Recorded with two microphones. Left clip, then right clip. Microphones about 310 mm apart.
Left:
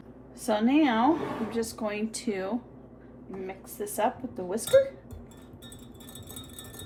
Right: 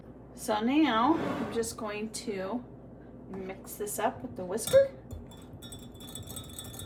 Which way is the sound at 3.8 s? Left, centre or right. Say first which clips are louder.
Left 3 dB; left.